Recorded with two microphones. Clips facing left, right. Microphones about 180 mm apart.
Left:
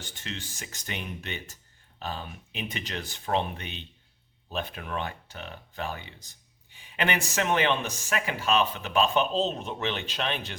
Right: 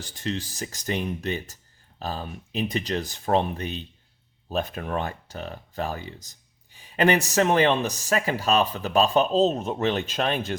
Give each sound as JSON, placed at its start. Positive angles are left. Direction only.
{"t": 0.0, "sound": "speech", "side_deg": -35}